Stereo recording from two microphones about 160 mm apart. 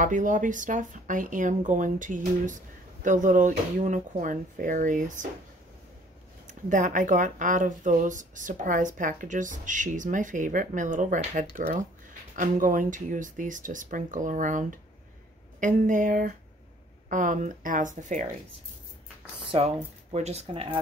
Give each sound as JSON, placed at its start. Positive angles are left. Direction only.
{"t": 0.0, "sound": "speech", "side_deg": -55}
{"t": 6.4, "sound": "a woman's voice", "side_deg": -55}
{"t": 19.5, "sound": "speech", "side_deg": -40}